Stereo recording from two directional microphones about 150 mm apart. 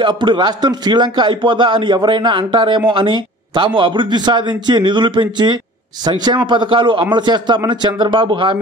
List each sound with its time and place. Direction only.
0.0 s a man's voice: 30° right (ahead or behind)